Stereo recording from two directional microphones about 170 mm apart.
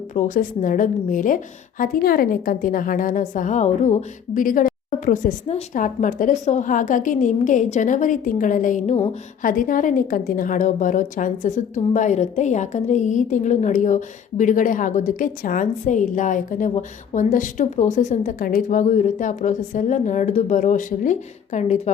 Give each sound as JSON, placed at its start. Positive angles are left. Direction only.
{"t": 0.1, "sound": "a woman's voice", "side_deg": 50}
{"t": 9.4, "sound": "a woman's voice", "side_deg": 55}